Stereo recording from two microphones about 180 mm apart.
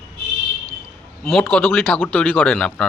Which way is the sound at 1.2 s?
Centre (ahead or behind).